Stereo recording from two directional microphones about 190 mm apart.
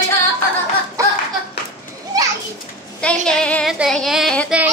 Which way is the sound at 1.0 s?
15° right (ahead or behind).